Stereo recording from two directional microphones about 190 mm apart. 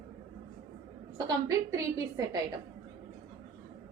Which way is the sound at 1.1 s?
20° right (ahead or behind).